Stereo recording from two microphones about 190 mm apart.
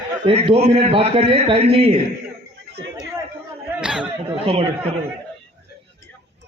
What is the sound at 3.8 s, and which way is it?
Chatter, 5° right (ahead or behind).